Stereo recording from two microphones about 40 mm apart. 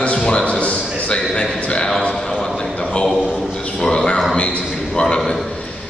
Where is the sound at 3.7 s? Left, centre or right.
Centre.